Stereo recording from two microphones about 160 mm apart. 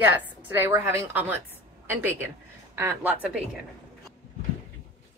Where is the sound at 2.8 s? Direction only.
15° right (ahead or behind).